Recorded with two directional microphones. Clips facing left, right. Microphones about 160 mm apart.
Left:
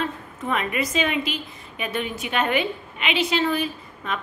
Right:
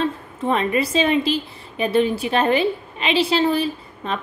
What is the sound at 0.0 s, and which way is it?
A woman's voice, 30° right (ahead or behind).